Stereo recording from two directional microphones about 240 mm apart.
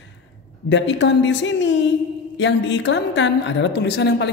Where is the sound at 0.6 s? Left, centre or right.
Left.